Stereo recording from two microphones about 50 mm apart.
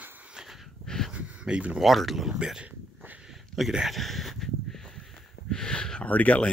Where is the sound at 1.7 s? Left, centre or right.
Centre.